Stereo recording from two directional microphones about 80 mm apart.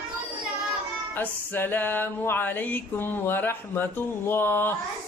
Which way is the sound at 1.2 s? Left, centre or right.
Left.